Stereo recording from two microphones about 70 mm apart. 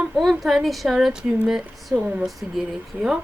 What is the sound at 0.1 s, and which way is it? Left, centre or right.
A woman's voice, centre.